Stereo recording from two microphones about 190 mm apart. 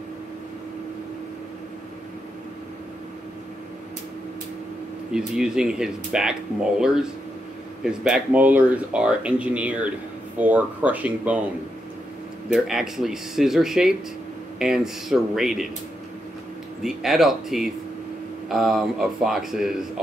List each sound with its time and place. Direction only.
5.1 s speech: 5° right (ahead or behind)
12.4 s speech: centre (ahead or behind)
16.8 s speech: centre (ahead or behind)